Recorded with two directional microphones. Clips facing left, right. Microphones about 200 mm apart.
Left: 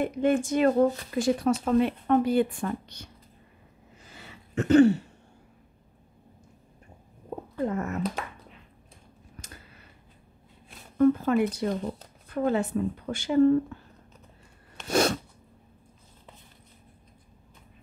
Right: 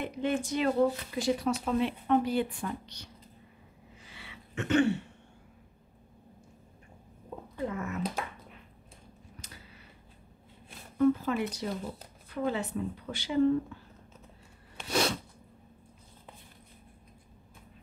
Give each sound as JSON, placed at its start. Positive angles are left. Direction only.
{"t": 0.0, "sound": "speech", "side_deg": 50}
{"t": 4.0, "sound": "a sound", "side_deg": 45}
{"t": 7.6, "sound": "speech", "side_deg": 45}
{"t": 8.0, "sound": "speech", "side_deg": -5}
{"t": 11.0, "sound": "speech", "side_deg": 50}
{"t": 14.9, "sound": "sneeze", "side_deg": 50}